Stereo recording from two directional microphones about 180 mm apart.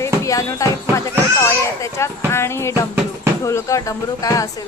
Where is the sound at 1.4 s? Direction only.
15° left (ahead or behind).